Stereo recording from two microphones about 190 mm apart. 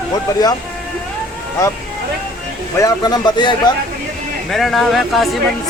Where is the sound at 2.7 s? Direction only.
20° left (ahead or behind).